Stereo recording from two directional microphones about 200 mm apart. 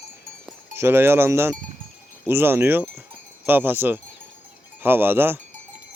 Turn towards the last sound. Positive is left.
turn(degrees=-10)  # may be behind; listen again after turning